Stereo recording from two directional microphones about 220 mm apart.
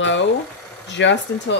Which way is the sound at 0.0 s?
55° left (ahead or behind).